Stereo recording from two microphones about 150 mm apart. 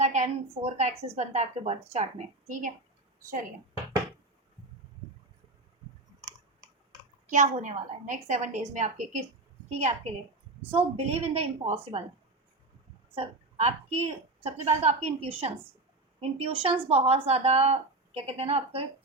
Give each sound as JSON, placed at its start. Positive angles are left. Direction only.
{"t": 0.0, "sound": "a woman's voice", "side_deg": -50}
{"t": 7.3, "sound": "a woman's voice", "side_deg": -55}
{"t": 13.1, "sound": "a woman's voice", "side_deg": -45}